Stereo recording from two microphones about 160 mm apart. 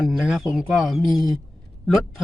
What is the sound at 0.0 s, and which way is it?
Speech, 5° right (ahead or behind).